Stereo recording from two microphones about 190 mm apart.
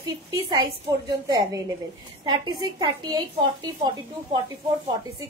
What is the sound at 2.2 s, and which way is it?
A woman's voice, 25° right (ahead or behind).